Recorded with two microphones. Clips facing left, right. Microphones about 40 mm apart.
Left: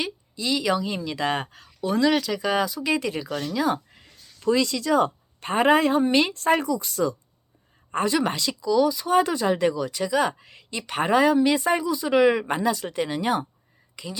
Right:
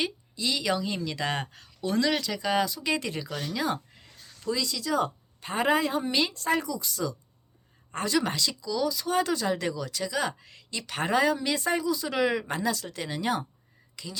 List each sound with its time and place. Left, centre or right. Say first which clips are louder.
0.0 s speech: left 1 dB; centre
4.4 s speech: left 8 dB; left
7.9 s speech: left 4 dB; left